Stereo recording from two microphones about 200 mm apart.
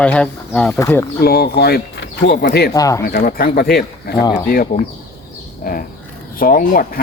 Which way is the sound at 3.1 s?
50° left (ahead or behind).